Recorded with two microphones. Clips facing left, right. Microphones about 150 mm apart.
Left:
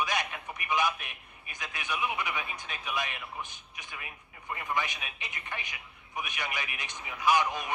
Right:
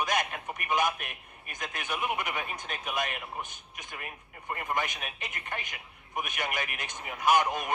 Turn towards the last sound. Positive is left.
turn(degrees=-45)  # may be behind; listen again after turning